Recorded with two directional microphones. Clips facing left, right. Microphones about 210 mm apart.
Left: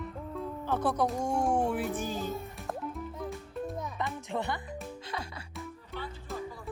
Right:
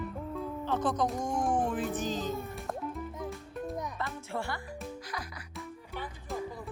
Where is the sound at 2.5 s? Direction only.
Centre (ahead or behind).